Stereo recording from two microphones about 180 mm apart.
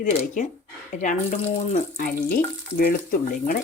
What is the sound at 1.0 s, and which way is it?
Speech, 45° left (ahead or behind).